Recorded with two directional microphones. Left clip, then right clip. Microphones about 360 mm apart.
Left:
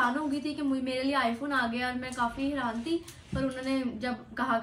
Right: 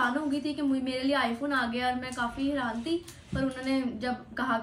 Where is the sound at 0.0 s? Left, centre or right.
Centre.